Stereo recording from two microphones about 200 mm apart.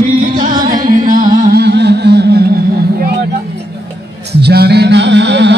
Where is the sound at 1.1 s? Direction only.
45° right (ahead or behind).